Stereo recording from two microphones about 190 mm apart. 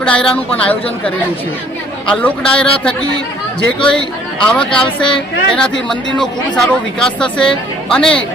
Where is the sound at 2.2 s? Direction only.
5° left (ahead or behind).